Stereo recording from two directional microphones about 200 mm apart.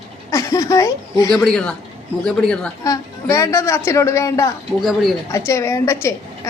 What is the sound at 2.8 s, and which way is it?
A woman's voice, 15° left (ahead or behind).